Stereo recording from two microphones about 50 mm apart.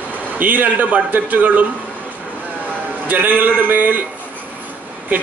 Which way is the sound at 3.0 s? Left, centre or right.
Right.